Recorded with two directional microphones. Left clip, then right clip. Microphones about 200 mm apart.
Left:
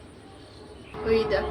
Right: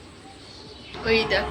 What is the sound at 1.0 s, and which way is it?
Speech, centre (ahead or behind).